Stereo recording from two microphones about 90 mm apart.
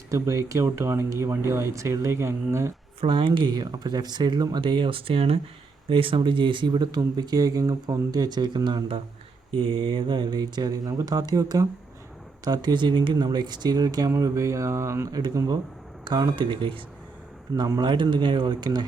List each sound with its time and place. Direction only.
0.1 s speech: 35° right (ahead or behind)
3.0 s speech: 70° right (ahead or behind); by 5.4 s 90° right
5.9 s speech: 80° right; by 8.8 s 55° right (ahead or behind)
9.6 s speech: 75° right (ahead or behind); by 11.7 s 40° right (ahead or behind)
12.5 s speech: 55° right (ahead or behind); by 15.1 s 30° right (ahead or behind)
15.1 s speech: 45° right (ahead or behind)
16.4 s speech: 70° right (ahead or behind)
17.5 s speech: 45° right (ahead or behind)